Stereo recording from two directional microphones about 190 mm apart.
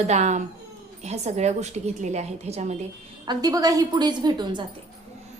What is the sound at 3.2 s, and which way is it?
A woman's voice, 20° right (ahead or behind).